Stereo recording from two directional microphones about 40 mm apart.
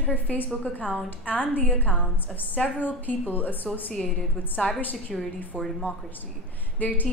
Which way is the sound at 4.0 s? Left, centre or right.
Left.